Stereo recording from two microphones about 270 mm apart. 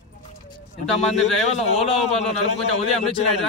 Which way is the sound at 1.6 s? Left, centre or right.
Left.